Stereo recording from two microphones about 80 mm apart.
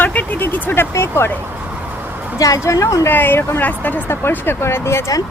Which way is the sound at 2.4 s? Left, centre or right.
Left.